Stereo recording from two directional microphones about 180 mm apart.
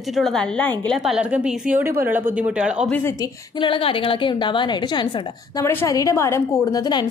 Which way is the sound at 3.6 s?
30° left (ahead or behind).